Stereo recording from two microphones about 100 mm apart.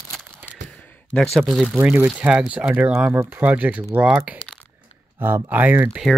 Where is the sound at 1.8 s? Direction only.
20° right (ahead or behind).